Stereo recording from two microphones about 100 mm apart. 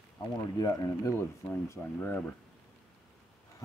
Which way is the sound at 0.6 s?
35° left (ahead or behind).